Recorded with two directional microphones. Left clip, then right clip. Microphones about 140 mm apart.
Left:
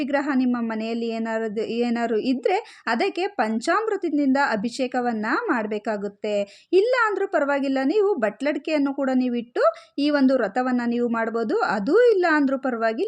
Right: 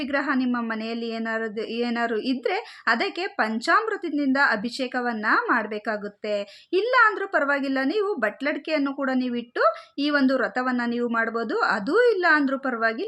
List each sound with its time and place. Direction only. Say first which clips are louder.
0.1 s speech: even; 45° left (ahead or behind)